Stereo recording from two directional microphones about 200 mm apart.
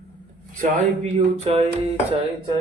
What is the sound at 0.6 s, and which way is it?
Speech, 30° right (ahead or behind).